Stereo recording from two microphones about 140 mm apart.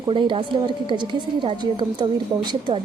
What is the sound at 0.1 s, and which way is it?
A woman's voice, 35° right (ahead or behind).